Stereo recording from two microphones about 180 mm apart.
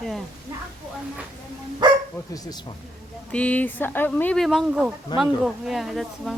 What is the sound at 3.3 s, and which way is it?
Speech, 5° left (ahead or behind).